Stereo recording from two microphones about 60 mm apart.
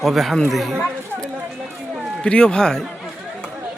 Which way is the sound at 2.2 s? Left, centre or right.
Centre.